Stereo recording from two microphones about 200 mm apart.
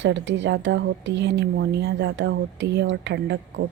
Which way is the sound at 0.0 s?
65° right (ahead or behind).